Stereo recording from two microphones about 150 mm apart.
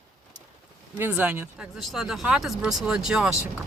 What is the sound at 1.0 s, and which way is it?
Speech, 10° right (ahead or behind).